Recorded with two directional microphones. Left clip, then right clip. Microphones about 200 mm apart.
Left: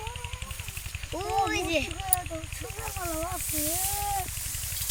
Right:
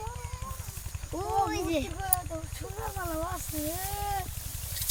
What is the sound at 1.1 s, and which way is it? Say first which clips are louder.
Speech: left 1 dB; 45° right (ahead or behind).